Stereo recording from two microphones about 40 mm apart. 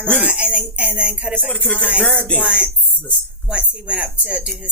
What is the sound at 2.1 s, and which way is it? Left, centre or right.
Speech, left.